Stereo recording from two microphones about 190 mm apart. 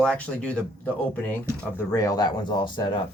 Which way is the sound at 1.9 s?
20° left (ahead or behind).